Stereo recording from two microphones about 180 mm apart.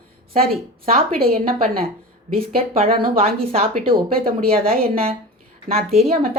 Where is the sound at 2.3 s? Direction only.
30° right (ahead or behind).